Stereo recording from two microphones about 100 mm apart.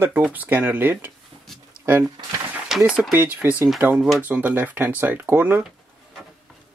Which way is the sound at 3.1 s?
15° right (ahead or behind).